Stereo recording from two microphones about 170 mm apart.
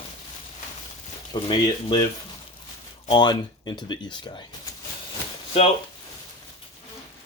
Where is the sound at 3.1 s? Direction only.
25° left (ahead or behind).